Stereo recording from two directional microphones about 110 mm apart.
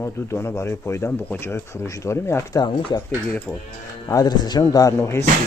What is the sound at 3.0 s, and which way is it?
Speech, 15° left (ahead or behind).